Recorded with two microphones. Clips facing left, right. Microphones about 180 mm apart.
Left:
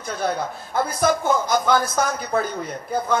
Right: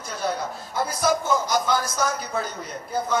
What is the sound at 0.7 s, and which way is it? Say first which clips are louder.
Speech: left 3 dB; 55° left (ahead or behind).